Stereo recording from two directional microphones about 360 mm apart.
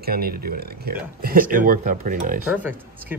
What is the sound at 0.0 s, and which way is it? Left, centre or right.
Speech, right.